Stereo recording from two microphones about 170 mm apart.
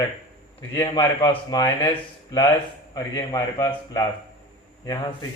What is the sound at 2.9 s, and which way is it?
Speech, 25° left (ahead or behind).